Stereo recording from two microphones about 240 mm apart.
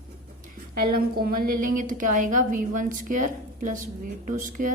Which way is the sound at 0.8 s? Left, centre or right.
Right.